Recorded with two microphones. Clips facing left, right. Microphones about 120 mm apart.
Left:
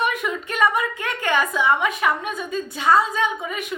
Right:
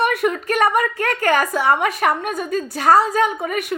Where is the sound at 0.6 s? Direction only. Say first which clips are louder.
Right 2 dB; 40° right (ahead or behind).